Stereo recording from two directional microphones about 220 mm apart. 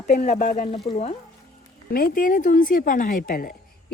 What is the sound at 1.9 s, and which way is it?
Speech, 40° left (ahead or behind).